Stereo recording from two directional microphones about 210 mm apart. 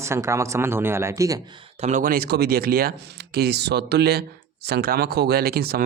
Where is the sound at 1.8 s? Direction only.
35° right (ahead or behind).